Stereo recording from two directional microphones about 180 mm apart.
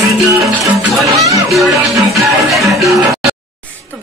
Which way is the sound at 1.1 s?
15° right (ahead or behind).